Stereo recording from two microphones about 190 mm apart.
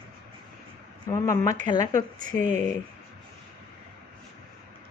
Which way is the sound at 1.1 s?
15° left (ahead or behind).